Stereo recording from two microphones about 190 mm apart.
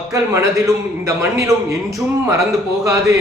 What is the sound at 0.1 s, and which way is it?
Speech, 15° right (ahead or behind).